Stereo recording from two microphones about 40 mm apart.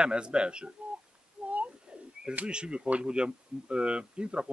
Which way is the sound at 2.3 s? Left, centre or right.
Right.